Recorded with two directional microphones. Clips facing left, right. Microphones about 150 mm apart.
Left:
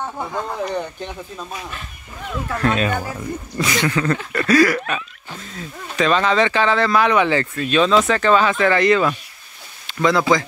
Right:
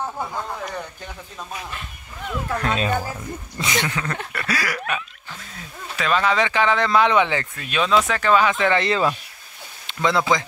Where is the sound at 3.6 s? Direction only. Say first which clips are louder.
Left 4 dB; 20° right (ahead or behind).